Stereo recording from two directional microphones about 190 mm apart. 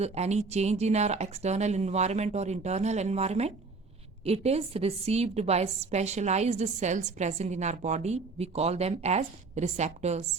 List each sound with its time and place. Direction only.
0.0 s a woman's voice: 35° right (ahead or behind)